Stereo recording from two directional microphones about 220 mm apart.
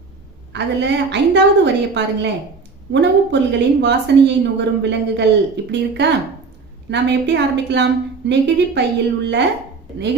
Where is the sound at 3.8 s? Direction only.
50° right (ahead or behind).